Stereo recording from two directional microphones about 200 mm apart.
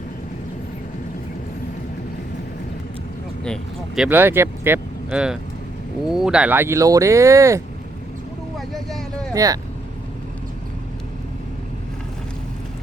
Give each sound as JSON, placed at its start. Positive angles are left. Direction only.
{"t": 3.4, "sound": "speech", "side_deg": 0}
{"t": 8.5, "sound": "a sound", "side_deg": 0}
{"t": 9.3, "sound": "speech", "side_deg": -15}